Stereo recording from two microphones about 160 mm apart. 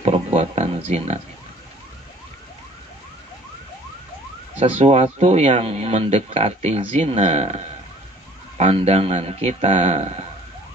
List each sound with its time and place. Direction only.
0.0 s speech: 40° right (ahead or behind)
4.6 s speech: 35° right (ahead or behind)